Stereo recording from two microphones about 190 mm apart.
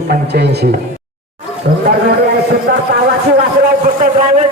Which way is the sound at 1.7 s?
55° right (ahead or behind).